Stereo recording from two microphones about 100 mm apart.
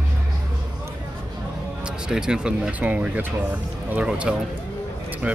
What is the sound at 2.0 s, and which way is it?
Speech, 5° right (ahead or behind).